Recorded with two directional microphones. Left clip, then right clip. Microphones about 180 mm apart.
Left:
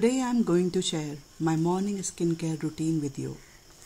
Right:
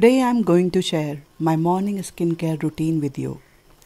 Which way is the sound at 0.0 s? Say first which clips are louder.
Right 10 dB; 40° right (ahead or behind).